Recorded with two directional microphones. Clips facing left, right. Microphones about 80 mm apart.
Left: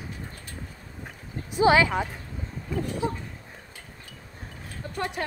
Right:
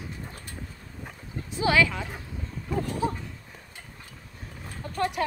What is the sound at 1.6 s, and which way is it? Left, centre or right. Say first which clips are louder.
Speech: left 4 dB; left.